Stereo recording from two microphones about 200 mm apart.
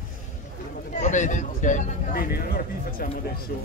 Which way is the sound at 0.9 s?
40° left (ahead or behind).